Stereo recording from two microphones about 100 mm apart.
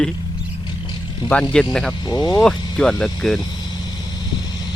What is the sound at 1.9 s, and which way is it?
Speech, 40° left (ahead or behind).